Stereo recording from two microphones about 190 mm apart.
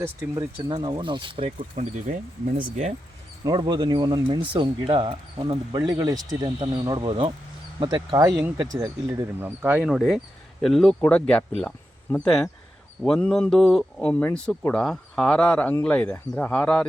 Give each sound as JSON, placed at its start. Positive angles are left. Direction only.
{"t": 0.0, "sound": "speech", "side_deg": -15}
{"t": 3.4, "sound": "speech", "side_deg": -20}